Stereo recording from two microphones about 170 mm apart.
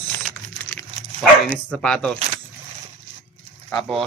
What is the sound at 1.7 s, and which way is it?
Speech, 5° left (ahead or behind).